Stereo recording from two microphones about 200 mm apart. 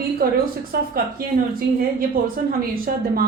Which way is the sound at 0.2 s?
50° right (ahead or behind).